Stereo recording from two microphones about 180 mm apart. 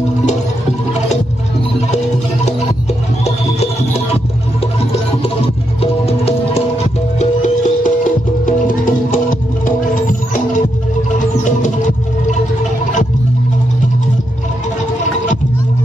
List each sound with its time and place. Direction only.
3.3 s music: 35° left (ahead or behind)